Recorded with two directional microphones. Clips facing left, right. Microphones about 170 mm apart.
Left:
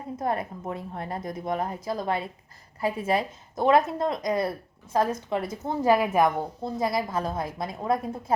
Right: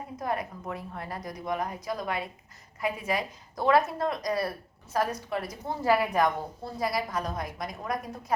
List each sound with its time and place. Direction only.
0.2 s a woman's voice: 25° left (ahead or behind)